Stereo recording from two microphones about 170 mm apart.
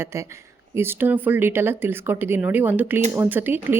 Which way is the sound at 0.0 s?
15° right (ahead or behind).